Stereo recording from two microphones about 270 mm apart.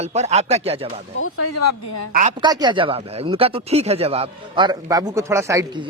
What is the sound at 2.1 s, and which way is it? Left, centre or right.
Speech, right.